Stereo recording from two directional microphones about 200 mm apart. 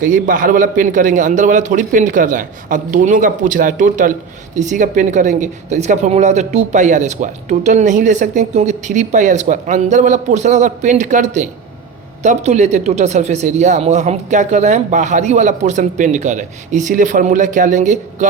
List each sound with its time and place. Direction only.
0.0 s a woman's voice: 40° right (ahead or behind)